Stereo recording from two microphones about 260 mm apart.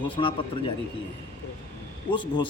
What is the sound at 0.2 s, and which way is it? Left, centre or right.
Speech, centre.